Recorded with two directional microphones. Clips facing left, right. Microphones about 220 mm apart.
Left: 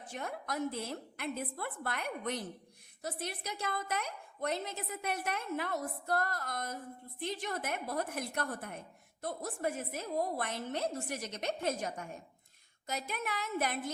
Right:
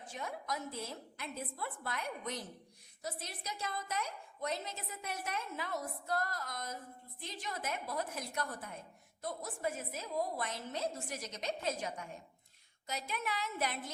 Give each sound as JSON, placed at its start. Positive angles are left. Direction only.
{"t": 0.1, "sound": "a woman's voice", "side_deg": 60}